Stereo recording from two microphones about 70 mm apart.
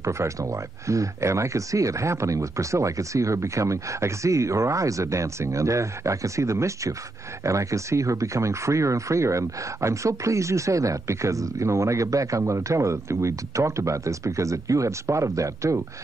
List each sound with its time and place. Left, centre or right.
0.0 s speech: right